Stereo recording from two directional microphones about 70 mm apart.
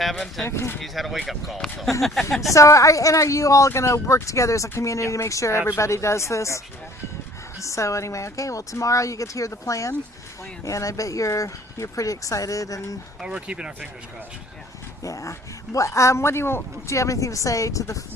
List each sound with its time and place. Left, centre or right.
0.0 s speech: centre
0.4 s speech: left
0.8 s speech: centre
2.5 s a man's voice: left
7.6 s a man's voice: left
13.2 s speech: centre
15.0 s a man's voice: left